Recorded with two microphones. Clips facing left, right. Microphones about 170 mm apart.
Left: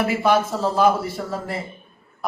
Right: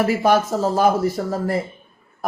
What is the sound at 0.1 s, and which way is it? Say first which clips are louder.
Speech: right 2 dB; 45° right (ahead or behind).